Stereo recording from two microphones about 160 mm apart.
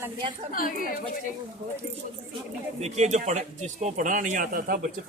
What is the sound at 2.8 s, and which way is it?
Speech, 45° right (ahead or behind).